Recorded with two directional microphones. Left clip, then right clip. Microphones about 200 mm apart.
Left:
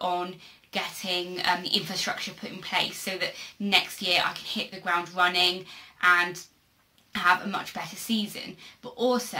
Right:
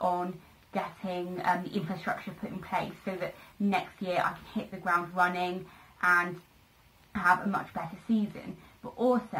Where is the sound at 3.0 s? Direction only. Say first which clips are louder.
Left 5 dB; 30° left (ahead or behind).